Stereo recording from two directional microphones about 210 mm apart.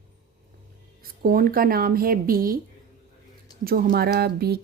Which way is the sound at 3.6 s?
45° right (ahead or behind).